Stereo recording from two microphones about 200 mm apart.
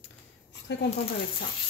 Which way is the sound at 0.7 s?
60° left (ahead or behind).